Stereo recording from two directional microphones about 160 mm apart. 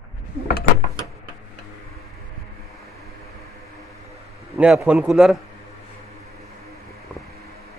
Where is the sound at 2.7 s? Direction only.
20° left (ahead or behind).